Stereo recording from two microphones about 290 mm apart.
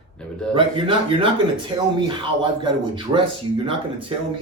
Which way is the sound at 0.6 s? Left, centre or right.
Centre.